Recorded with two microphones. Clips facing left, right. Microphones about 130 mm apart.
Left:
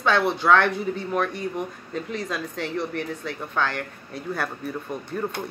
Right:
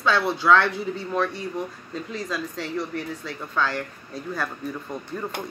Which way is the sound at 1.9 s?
60° left (ahead or behind).